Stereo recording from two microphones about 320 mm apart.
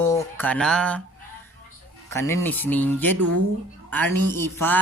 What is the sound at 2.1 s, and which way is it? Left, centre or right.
Speech, centre.